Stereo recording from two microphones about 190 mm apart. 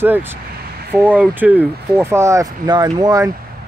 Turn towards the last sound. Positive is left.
turn(degrees=-20)  # may be behind; listen again after turning